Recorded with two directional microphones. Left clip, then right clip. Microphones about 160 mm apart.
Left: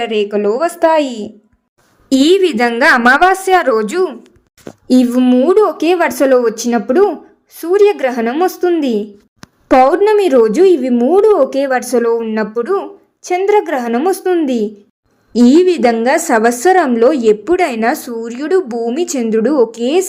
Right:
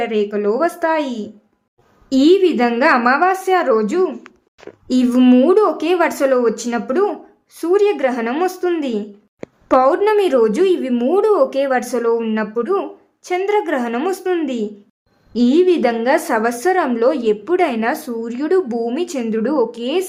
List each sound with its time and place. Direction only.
0.0 s a woman's voice: 25° left (ahead or behind)
2.0 s a woman's voice: 40° left (ahead or behind)
4.9 s a woman's voice: 25° left (ahead or behind)
5.2 s speech: 10° left (ahead or behind)
5.5 s a woman's voice: 25° left (ahead or behind)